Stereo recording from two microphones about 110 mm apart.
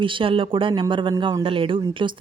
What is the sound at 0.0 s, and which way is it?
Speech, 50° right (ahead or behind).